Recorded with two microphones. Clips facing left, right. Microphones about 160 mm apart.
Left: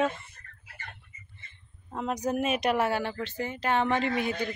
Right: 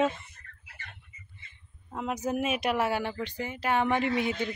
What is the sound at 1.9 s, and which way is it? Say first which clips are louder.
A woman's voice: left 1 dB; 10° right (ahead or behind).